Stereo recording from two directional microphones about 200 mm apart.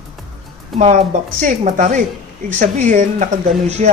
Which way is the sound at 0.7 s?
35° right (ahead or behind).